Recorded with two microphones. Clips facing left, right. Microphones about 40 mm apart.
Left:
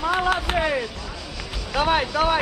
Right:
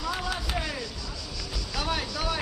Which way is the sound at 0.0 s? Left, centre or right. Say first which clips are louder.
Left 10 dB; left.